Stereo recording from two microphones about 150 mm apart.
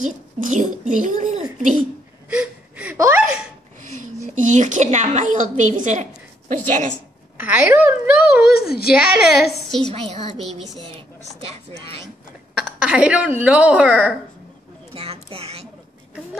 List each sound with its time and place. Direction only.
0.0 s a child's voice: 55° right (ahead or behind)
2.2 s gasp: 10° right (ahead or behind)
3.8 s a woman's voice: 55° right (ahead or behind)
7.3 s a child's voice: 10° right (ahead or behind)
8.5 s a woman's voice: 90° left
8.9 s a woman's voice: 5° right (ahead or behind)
9.9 s speech: 35° right (ahead or behind)
11.4 s speech: 40° right (ahead or behind)
12.5 s speech: 5° right (ahead or behind)
15.0 s a sound: 40° right (ahead or behind)